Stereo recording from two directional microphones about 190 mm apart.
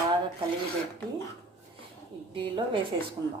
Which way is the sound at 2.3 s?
25° right (ahead or behind).